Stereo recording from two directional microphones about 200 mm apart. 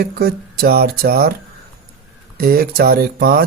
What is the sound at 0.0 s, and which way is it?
Speech, 50° right (ahead or behind).